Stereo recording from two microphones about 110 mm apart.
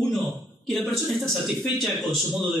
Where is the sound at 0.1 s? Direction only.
Centre (ahead or behind).